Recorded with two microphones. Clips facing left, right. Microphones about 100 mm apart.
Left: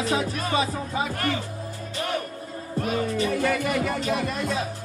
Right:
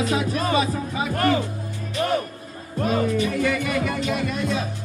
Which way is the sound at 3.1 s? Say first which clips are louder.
Right 1 dB; 35° left (ahead or behind).